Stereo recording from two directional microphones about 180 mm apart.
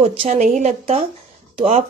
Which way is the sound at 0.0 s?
30° right (ahead or behind).